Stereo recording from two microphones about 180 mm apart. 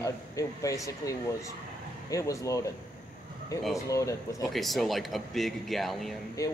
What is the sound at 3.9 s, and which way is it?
Speech, 15° left (ahead or behind).